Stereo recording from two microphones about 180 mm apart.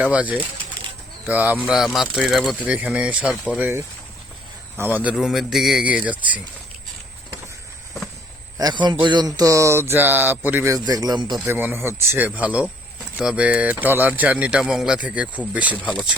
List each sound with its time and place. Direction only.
0.0 s speech: 5° right (ahead or behind)
8.5 s speech: 25° right (ahead or behind)
11.3 s speech: 10° right (ahead or behind)
15.8 s speech: 5° left (ahead or behind)